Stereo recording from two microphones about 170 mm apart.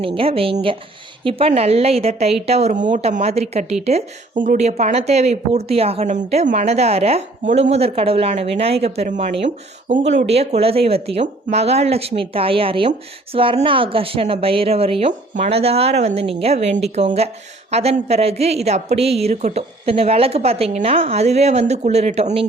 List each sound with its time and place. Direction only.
0.0 s a woman's voice: 30° right (ahead or behind)